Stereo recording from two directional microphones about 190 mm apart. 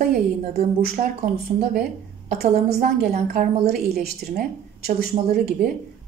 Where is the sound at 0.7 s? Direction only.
50° right (ahead or behind).